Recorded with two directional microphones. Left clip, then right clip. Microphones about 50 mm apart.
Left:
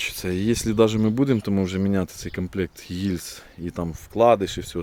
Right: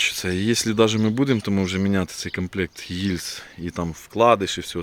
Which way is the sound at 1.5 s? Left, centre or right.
Centre.